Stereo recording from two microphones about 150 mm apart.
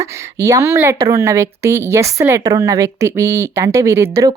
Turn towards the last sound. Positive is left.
turn(degrees=-20)  # may be behind; listen again after turning